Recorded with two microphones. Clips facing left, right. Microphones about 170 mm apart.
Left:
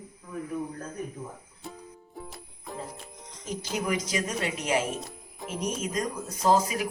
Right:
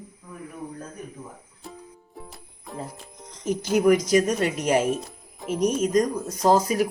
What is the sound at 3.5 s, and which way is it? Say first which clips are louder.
Speech: right 11 dB; 50° right (ahead or behind).